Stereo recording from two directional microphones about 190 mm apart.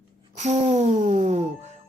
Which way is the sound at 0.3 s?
40° right (ahead or behind).